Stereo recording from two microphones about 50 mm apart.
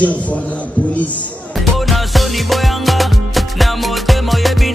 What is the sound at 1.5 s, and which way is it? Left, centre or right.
Music, centre.